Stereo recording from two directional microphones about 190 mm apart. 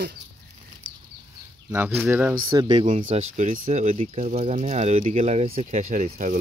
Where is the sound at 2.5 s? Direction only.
25° right (ahead or behind).